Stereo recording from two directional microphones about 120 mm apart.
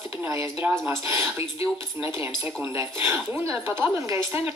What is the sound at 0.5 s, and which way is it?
Speech, 20° right (ahead or behind).